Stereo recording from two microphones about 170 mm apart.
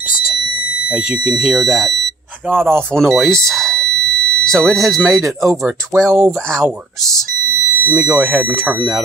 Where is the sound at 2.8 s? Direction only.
5° left (ahead or behind).